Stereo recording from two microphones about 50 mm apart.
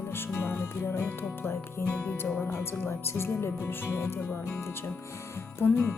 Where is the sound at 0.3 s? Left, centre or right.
Left.